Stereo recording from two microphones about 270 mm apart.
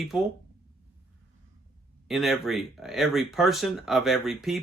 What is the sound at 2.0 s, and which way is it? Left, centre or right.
Speech, centre.